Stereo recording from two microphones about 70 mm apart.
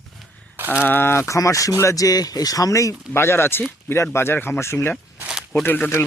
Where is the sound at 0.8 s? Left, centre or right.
Left.